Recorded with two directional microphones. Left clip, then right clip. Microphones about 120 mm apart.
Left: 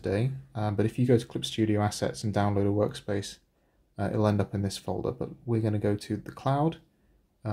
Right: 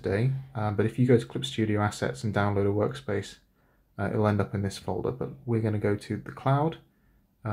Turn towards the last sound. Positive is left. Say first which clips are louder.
# right 1 dB
turn(degrees=30)  # may be behind; listen again after turning